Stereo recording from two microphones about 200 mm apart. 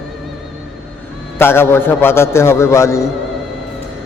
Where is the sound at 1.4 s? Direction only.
10° left (ahead or behind).